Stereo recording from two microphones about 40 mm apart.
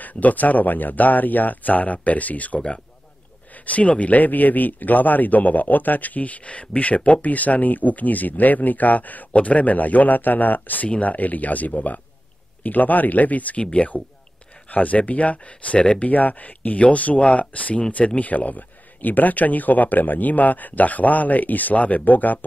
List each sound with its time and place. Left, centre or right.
0.0 s a man's voice: left
13.6 s speech: left
14.7 s speech: left
16.0 s a man's voice: left